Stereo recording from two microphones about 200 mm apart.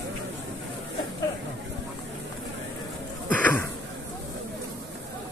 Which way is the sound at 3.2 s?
10° left (ahead or behind).